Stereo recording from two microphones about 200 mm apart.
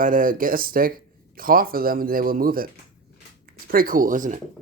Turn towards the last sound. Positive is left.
turn(degrees=-40)  # may be behind; listen again after turning